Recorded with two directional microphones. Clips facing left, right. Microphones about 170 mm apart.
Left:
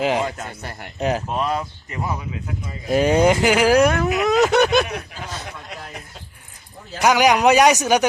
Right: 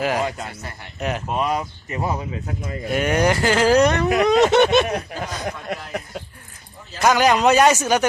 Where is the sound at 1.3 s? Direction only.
5° right (ahead or behind).